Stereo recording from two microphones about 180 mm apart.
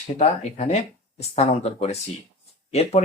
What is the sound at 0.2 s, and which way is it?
Speech, 35° left (ahead or behind).